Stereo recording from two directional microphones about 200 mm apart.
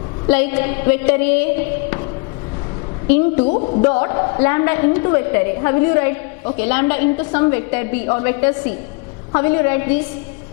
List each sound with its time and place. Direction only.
0.3 s a woman's voice: 10° left (ahead or behind)
3.1 s a woman's voice: 10° left (ahead or behind)
3.4 s speech: 35° left (ahead or behind)
4.0 s a woman's voice: 20° left (ahead or behind)